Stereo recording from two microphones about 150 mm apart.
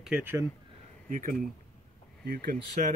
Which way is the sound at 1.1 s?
65° right (ahead or behind).